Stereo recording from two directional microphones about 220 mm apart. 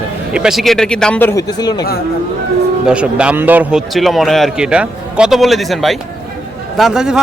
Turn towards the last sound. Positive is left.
turn(degrees=-5)  # may be behind; listen again after turning